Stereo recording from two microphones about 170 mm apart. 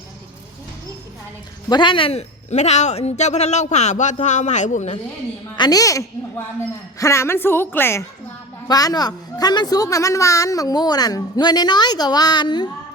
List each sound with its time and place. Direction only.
1.7 s a man's voice: 30° left (ahead or behind); by 4.9 s 45° left (ahead or behind)
5.5 s a woman's voice: 25° left (ahead or behind)